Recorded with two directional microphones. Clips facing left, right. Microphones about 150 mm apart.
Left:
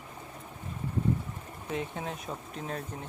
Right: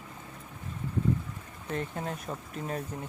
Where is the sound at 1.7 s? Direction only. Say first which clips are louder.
Right 1 dB; centre (ahead or behind).